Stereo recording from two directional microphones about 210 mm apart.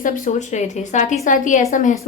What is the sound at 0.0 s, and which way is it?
Speech, 35° left (ahead or behind).